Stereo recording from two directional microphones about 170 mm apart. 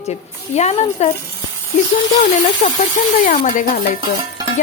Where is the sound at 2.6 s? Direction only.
50° left (ahead or behind).